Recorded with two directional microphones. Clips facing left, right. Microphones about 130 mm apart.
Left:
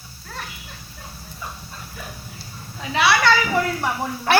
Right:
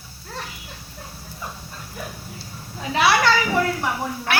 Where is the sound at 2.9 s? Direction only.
40° right (ahead or behind).